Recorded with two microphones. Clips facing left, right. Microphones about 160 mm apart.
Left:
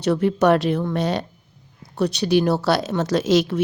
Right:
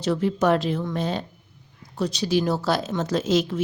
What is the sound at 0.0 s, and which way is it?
Speech, 65° left (ahead or behind).